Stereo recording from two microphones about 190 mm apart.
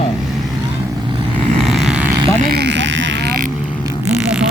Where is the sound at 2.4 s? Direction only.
60° right (ahead or behind).